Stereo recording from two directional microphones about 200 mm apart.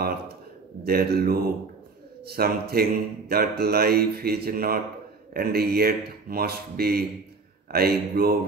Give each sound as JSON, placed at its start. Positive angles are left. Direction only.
{"t": 0.8, "sound": "a man's voice", "side_deg": -50}